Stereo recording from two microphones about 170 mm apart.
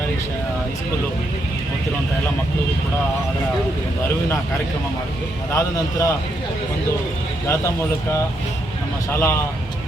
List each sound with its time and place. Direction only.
5.5 s a man's voice: 20° left (ahead or behind)
9.1 s speech: 15° left (ahead or behind)